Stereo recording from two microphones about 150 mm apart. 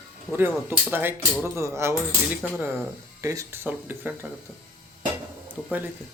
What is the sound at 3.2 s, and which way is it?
Speech, 20° right (ahead or behind).